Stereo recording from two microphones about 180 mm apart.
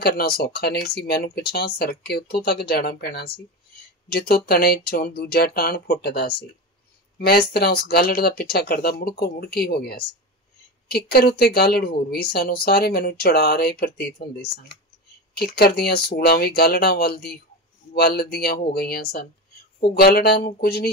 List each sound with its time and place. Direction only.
0.0 s a woman's voice: 60° left (ahead or behind)